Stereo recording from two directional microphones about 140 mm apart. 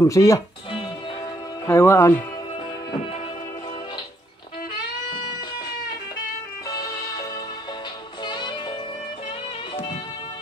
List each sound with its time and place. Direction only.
0.0 s speech: 25° left (ahead or behind)
1.7 s speech: 20° left (ahead or behind)
6.7 s music: 25° left (ahead or behind)